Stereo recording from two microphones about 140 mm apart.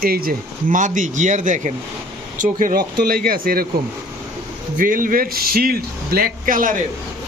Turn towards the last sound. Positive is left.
turn(degrees=-75)  # may be behind; listen again after turning